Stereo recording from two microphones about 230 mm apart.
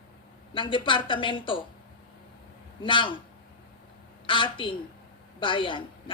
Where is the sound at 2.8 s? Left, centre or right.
Left.